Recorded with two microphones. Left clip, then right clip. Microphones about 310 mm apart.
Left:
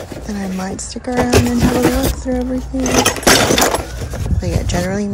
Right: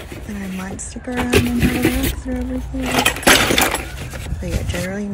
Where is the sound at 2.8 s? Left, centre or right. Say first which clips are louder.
Left 2 dB; left.